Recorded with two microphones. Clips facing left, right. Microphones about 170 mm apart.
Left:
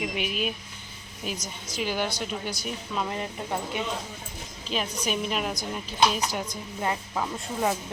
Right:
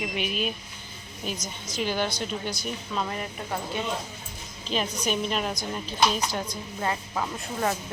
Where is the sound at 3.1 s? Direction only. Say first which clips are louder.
Left 1 dB; 20° left (ahead or behind).